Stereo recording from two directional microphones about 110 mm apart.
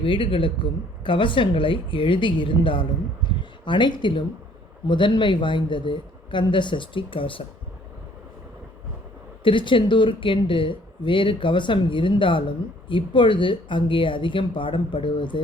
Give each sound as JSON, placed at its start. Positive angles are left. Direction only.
{"t": 0.0, "sound": "speech", "side_deg": 50}
{"t": 3.2, "sound": "a sound", "side_deg": 45}
{"t": 4.9, "sound": "speech", "side_deg": 45}
{"t": 9.4, "sound": "speech", "side_deg": 50}